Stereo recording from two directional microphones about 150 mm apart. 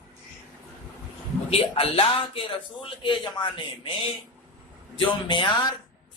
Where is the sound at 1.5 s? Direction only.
40° left (ahead or behind).